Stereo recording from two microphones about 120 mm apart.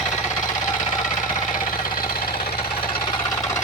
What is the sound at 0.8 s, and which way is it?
Engine knocking, 90° left.